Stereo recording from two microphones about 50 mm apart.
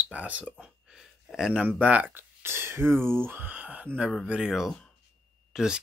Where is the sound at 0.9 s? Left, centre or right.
Centre.